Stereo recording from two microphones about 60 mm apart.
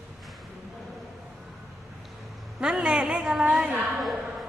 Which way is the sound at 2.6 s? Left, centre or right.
Centre.